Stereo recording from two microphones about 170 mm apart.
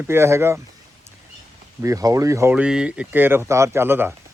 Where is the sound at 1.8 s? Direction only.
20° right (ahead or behind).